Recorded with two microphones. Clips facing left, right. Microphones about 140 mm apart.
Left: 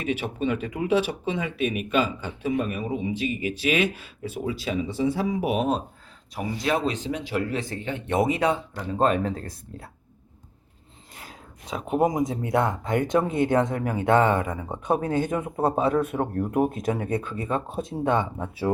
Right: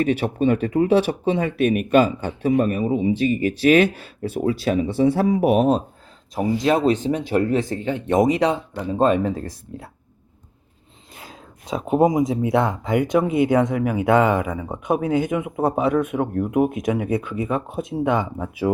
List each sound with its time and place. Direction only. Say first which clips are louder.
0.0 s speech: right 7 dB; 45° right (ahead or behind)
0.9 s speech: right 6 dB; 50° right (ahead or behind)
5.3 s speech: right 7 dB; 45° right (ahead or behind)
6.9 s speech: right 7 dB; 50° right (ahead or behind)
8.7 s speech: right 4 dB; 20° right (ahead or behind)
11.9 s speech: right 5 dB; 20° right (ahead or behind)